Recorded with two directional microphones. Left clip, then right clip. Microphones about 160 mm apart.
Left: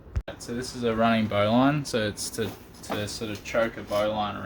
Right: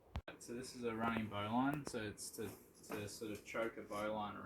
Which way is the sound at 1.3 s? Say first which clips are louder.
Left 18 dB; 55° left (ahead or behind).